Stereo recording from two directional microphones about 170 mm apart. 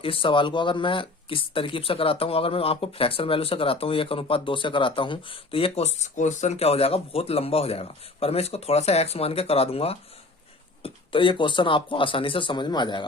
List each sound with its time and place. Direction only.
0.0 s speech: 30° left (ahead or behind)